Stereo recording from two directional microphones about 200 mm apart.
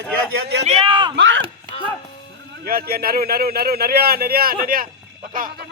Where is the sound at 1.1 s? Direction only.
65° right (ahead or behind).